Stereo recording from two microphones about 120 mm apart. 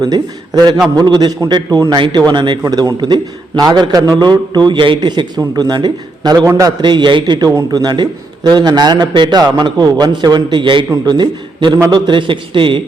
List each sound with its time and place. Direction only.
0.0 s a man's voice: 35° right (ahead or behind)